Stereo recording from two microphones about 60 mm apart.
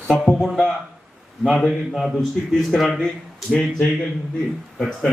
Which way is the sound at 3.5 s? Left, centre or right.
Centre.